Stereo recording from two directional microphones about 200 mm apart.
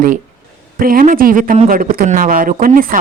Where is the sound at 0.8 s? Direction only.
45° right (ahead or behind).